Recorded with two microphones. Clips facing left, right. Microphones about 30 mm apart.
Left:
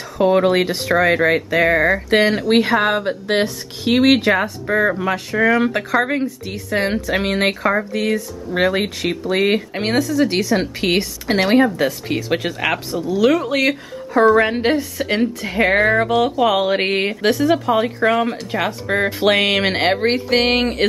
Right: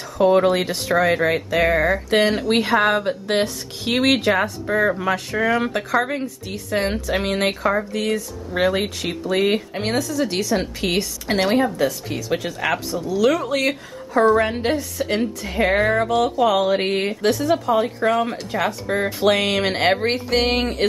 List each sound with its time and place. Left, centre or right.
0.2 s a woman's voice: centre